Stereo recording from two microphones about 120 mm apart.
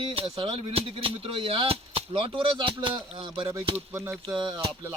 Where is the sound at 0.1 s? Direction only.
50° right (ahead or behind).